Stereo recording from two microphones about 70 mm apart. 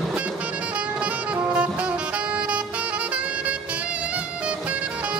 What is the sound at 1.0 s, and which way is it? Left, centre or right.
Saxophone, centre.